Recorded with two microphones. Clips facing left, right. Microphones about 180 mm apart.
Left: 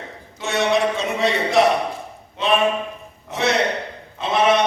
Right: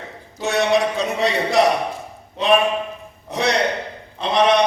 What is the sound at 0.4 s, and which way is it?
A man's voice, centre (ahead or behind).